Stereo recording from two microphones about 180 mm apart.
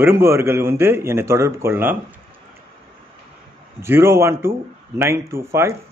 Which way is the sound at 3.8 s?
15° right (ahead or behind).